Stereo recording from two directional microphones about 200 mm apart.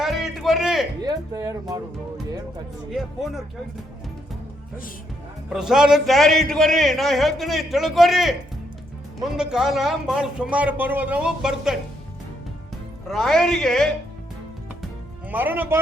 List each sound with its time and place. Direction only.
0.0 s a sound: centre (ahead or behind)
1.0 s speech: 20° right (ahead or behind)
2.9 s a man's voice: centre (ahead or behind)
5.5 s a man's voice: 5° right (ahead or behind)
13.1 s a man's voice: centre (ahead or behind)
15.3 s speech: 10° right (ahead or behind)